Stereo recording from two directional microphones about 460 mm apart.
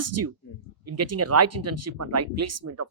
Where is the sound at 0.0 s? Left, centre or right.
Right.